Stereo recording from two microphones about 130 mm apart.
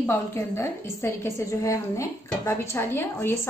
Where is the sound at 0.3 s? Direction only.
20° left (ahead or behind).